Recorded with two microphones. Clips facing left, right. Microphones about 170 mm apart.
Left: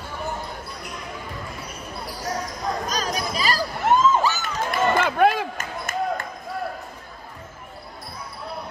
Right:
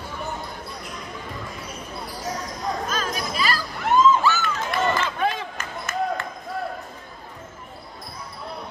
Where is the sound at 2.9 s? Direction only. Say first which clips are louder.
Left 1 dB; 40° left (ahead or behind).